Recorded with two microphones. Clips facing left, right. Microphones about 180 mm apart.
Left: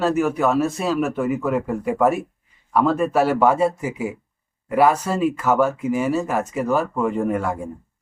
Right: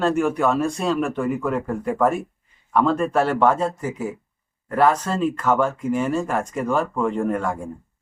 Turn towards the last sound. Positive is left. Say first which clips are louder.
# left 1 dB
turn(degrees=5)  # may be behind; listen again after turning